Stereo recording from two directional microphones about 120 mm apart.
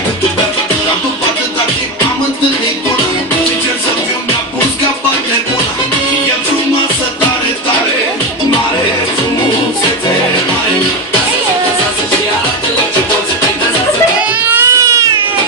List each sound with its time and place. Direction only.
14.5 s baby cry: 25° right (ahead or behind)